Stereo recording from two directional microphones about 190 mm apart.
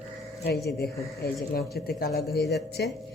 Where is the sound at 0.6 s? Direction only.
55° left (ahead or behind).